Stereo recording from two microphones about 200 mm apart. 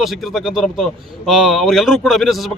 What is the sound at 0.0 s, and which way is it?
A man's voice, centre (ahead or behind).